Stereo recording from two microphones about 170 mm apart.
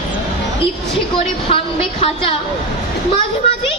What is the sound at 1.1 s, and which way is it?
A woman's voice, 35° left (ahead or behind).